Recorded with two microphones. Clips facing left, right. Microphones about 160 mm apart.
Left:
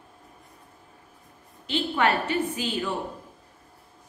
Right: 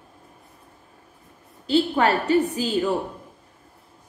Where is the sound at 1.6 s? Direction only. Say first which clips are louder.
Right 5 dB; 35° right (ahead or behind).